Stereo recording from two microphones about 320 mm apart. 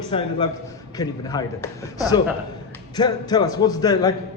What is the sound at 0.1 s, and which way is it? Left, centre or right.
A man's voice, centre.